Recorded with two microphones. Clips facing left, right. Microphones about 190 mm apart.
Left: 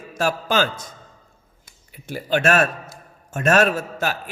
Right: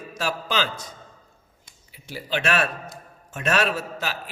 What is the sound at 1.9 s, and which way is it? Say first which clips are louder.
A man's voice: left 6 dB; 50° left (ahead or behind).